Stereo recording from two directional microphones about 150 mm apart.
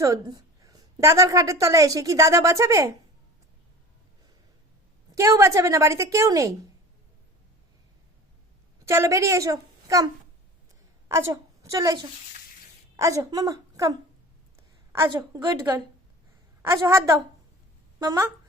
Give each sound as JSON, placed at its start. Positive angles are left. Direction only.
{"t": 0.0, "sound": "a woman's voice", "side_deg": -25}
{"t": 5.1, "sound": "a woman's voice", "side_deg": -20}
{"t": 8.8, "sound": "a woman's voice", "side_deg": -20}
{"t": 11.1, "sound": "a woman's voice", "side_deg": -20}
{"t": 15.1, "sound": "a woman's voice", "side_deg": -25}
{"t": 16.7, "sound": "a woman's voice", "side_deg": -20}